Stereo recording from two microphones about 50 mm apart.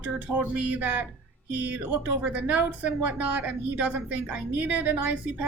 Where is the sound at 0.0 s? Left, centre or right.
Right.